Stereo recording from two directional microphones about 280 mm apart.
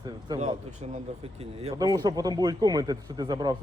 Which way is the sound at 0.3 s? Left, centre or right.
Right.